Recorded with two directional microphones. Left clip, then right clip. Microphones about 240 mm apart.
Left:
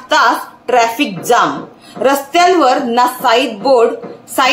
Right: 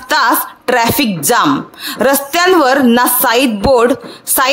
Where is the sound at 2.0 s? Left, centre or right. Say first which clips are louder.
Left 1 dB; right.